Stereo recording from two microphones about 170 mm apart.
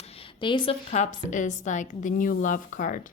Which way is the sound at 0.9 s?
45° left (ahead or behind).